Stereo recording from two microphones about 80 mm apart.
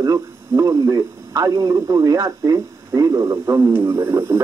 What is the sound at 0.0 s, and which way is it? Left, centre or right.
Speech, right.